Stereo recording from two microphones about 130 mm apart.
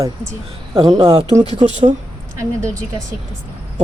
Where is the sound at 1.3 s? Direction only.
60° right (ahead or behind).